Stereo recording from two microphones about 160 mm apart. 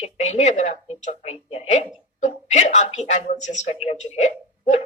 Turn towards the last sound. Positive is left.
turn(degrees=45)  # may be behind; listen again after turning